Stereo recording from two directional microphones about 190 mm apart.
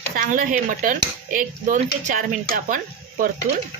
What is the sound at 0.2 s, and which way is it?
Speech, 45° right (ahead or behind).